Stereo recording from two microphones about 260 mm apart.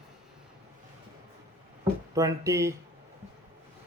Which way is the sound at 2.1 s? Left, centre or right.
Centre.